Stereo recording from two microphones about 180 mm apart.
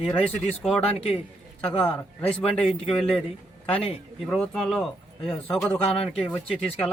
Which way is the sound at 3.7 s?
30° left (ahead or behind).